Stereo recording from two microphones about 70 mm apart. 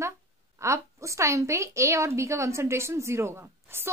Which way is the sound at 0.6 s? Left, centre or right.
Right.